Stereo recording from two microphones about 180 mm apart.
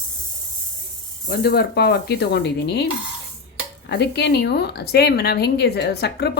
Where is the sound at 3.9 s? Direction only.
65° left (ahead or behind).